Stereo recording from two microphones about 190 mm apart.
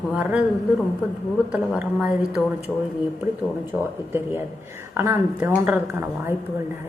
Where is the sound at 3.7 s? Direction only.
10° right (ahead or behind).